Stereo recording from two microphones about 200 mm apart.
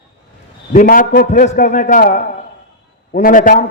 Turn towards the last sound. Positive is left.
turn(degrees=40)  # may be behind; listen again after turning